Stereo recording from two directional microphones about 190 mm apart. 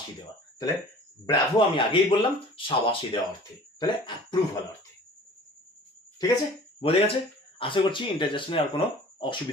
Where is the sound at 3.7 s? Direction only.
25° left (ahead or behind).